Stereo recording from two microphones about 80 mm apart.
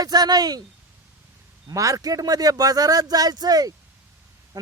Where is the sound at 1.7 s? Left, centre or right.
Right.